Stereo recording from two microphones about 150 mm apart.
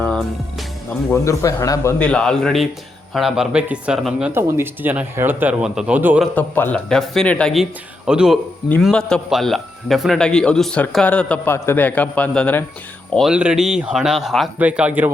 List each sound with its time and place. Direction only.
0.0 s music: 5° left (ahead or behind)
1.1 s a man's voice: 20° left (ahead or behind)
2.0 s speech: 5° left (ahead or behind)
4.3 s speech: 15° right (ahead or behind)
6.3 s a man's voice: 10° left (ahead or behind)
13.1 s speech: 5° right (ahead or behind)